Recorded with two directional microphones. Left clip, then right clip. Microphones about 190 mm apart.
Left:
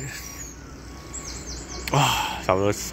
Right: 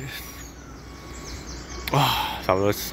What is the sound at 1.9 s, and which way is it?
Speech, centre (ahead or behind).